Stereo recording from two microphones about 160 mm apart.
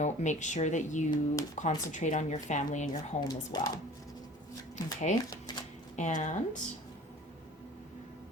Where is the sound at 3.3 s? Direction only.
25° left (ahead or behind).